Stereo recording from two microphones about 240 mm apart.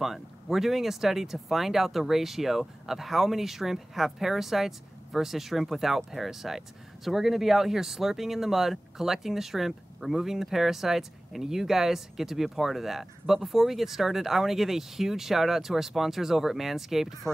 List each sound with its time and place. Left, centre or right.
0.0 s speech: centre